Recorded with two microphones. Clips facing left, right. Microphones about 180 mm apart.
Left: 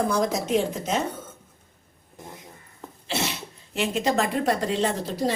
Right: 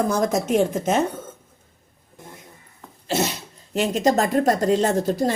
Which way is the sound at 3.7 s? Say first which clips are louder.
Right 4 dB; 40° right (ahead or behind).